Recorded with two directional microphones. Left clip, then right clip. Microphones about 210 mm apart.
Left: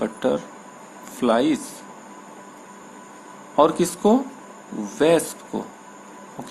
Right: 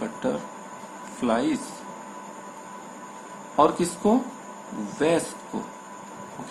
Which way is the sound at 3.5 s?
45° left (ahead or behind).